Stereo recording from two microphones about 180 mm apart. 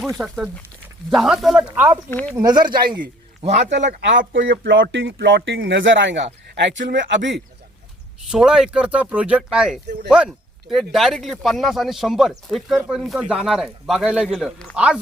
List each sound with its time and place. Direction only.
0.2 s speech: 10° right (ahead or behind)
2.0 s speech: 10° left (ahead or behind)
2.3 s speech: 20° right (ahead or behind)
2.9 s a sound: 25° right (ahead or behind)
3.5 s a man's voice: 75° right (ahead or behind)
8.3 s speech: 5° right (ahead or behind)